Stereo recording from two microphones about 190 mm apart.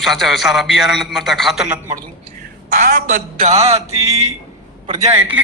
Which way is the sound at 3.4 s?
35° right (ahead or behind).